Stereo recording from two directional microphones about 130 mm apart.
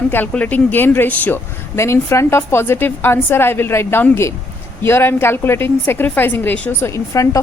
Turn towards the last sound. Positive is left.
turn(degrees=25)  # may be behind; listen again after turning